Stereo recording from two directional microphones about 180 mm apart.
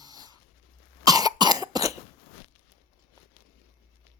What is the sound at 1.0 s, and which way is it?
Cough, 20° right (ahead or behind).